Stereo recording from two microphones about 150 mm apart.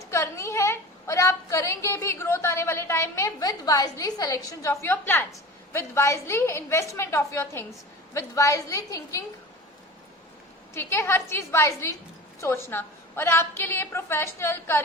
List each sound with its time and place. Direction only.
0.1 s a woman's voice: 20° left (ahead or behind)
10.8 s a woman's voice: 15° left (ahead or behind)